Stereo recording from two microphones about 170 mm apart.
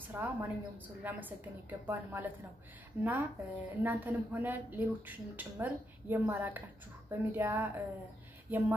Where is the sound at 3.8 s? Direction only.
10° right (ahead or behind).